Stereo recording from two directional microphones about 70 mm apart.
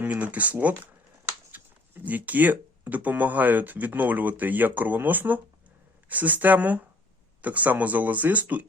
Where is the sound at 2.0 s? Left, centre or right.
Right.